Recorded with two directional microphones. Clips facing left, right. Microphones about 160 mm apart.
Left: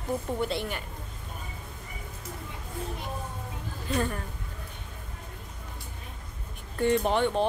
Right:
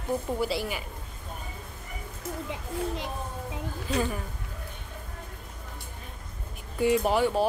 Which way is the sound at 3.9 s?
5° right (ahead or behind).